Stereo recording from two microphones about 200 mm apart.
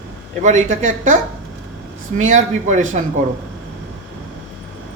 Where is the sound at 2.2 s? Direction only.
40° right (ahead or behind).